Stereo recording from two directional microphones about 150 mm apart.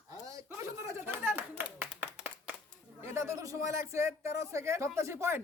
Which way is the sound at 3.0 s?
15° right (ahead or behind).